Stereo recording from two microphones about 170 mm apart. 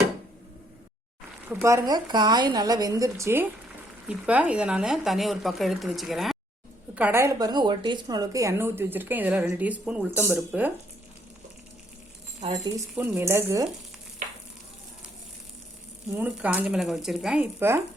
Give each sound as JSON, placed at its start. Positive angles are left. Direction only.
{"t": 1.6, "sound": "speech", "side_deg": -20}
{"t": 6.9, "sound": "a woman's voice", "side_deg": -10}
{"t": 12.6, "sound": "speech", "side_deg": -20}
{"t": 16.1, "sound": "a woman's voice", "side_deg": -10}